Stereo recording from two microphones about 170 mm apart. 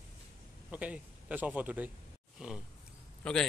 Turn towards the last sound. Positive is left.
turn(degrees=5)  # may be behind; listen again after turning